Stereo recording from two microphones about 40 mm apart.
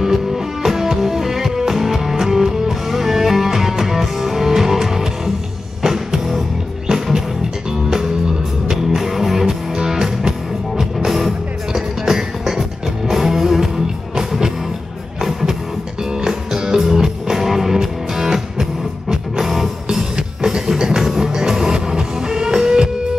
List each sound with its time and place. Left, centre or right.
0.0 s music: centre
8.6 s music: centre
16.0 s music: centre